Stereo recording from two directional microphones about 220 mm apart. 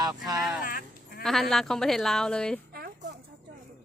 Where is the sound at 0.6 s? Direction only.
40° left (ahead or behind).